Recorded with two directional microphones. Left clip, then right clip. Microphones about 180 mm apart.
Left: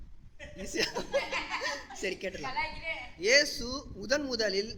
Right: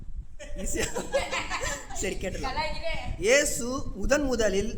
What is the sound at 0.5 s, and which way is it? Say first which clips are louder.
A child's voice: right 1 dB; 20° right (ahead or behind).